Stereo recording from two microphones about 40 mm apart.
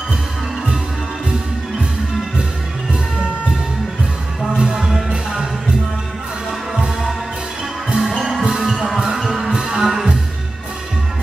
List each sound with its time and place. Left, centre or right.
4.6 s music: centre
7.9 s music: centre